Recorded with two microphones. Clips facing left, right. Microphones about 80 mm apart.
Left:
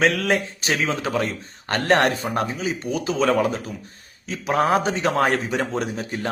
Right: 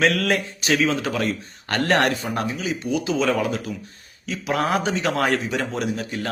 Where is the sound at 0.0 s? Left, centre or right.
Left.